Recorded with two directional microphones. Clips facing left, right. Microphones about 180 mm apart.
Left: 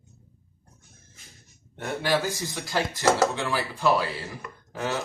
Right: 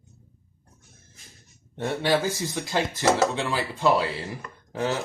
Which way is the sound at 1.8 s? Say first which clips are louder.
Right 2 dB; 20° right (ahead or behind).